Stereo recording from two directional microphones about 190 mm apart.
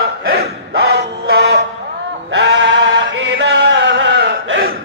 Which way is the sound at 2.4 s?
70° right (ahead or behind).